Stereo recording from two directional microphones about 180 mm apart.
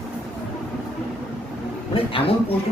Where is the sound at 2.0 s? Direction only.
30° left (ahead or behind).